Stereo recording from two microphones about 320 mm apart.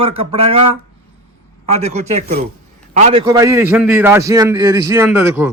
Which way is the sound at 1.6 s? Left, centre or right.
Centre.